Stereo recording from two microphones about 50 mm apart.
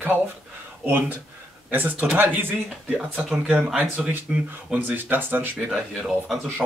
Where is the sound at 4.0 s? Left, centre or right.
Centre.